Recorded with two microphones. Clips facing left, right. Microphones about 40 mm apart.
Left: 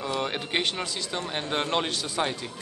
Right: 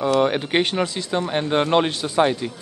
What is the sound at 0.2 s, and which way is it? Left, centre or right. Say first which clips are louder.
Speech: right 9 dB; centre.